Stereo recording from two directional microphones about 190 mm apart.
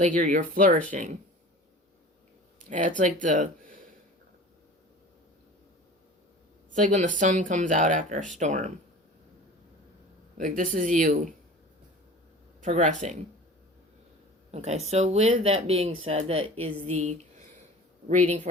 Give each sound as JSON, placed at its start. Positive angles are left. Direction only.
{"t": 0.0, "sound": "speech", "side_deg": -40}
{"t": 2.6, "sound": "speech", "side_deg": -40}
{"t": 6.7, "sound": "speech", "side_deg": -40}
{"t": 10.3, "sound": "speech", "side_deg": -45}
{"t": 12.5, "sound": "speech", "side_deg": -40}
{"t": 14.5, "sound": "speech", "side_deg": -35}